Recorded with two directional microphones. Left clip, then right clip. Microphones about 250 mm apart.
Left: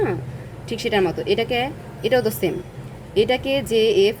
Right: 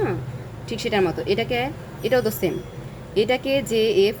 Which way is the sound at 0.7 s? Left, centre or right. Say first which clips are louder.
Left 2 dB; centre.